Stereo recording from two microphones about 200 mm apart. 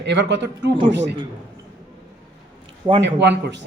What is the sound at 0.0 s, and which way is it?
Speech, 60° right (ahead or behind).